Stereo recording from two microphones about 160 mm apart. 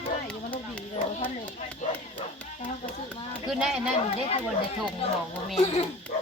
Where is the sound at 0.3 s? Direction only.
10° left (ahead or behind).